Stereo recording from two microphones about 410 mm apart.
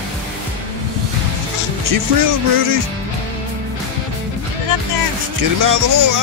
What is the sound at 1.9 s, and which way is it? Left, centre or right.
Speech, right.